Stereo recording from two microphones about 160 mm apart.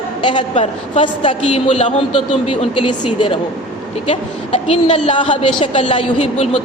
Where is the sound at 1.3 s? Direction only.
40° left (ahead or behind).